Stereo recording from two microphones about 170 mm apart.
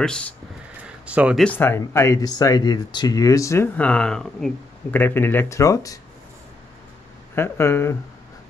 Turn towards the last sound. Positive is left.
turn(degrees=15)  # may be behind; listen again after turning